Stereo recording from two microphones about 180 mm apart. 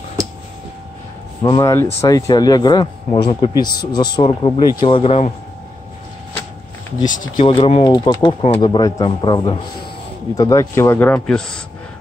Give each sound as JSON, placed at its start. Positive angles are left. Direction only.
{"t": 1.4, "sound": "speech", "side_deg": 20}
{"t": 7.1, "sound": "speech", "side_deg": 45}
{"t": 7.4, "sound": "speech", "side_deg": 30}